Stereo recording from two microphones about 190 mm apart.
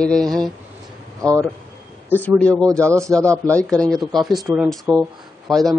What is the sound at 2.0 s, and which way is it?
Speech, 10° left (ahead or behind).